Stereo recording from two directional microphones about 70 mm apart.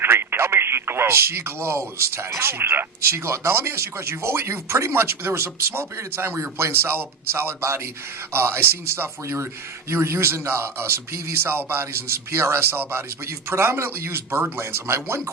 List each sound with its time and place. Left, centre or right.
0.0 s speech: right